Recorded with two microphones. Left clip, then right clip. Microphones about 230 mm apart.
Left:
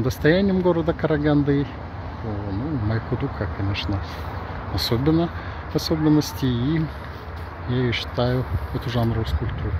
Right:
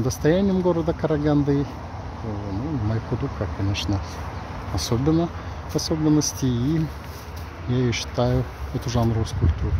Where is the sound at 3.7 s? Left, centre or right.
Centre.